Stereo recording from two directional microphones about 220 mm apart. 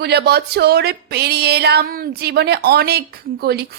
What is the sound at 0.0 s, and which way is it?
Speech, 45° right (ahead or behind).